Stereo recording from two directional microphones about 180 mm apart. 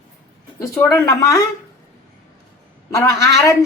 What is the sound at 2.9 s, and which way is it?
Speech, 15° left (ahead or behind).